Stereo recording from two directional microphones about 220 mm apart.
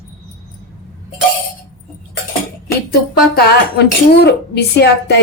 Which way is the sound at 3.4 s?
45° left (ahead or behind).